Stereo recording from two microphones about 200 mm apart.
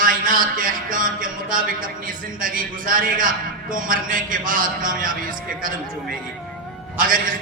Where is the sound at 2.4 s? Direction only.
45° right (ahead or behind).